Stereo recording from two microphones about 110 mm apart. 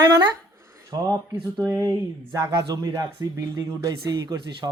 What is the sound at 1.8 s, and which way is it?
Speech, 30° right (ahead or behind).